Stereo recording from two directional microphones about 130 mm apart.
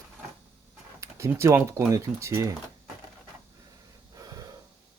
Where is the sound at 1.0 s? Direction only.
20° right (ahead or behind).